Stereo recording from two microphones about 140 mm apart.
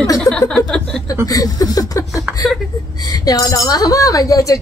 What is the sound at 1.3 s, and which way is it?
A woman's voice, 25° left (ahead or behind).